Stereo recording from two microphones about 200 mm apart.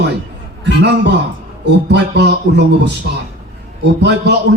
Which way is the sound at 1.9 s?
60° right (ahead or behind).